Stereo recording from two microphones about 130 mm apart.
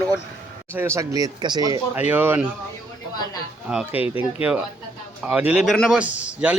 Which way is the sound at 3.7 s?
10° right (ahead or behind).